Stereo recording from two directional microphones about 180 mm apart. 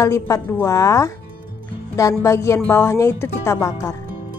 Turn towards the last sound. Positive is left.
turn(degrees=15)  # may be behind; listen again after turning